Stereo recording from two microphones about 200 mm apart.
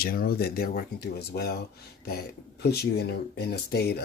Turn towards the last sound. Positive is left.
turn(degrees=55)  # may be behind; listen again after turning